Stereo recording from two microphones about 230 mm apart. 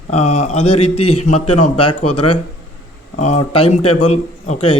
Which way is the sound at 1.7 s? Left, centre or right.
Left.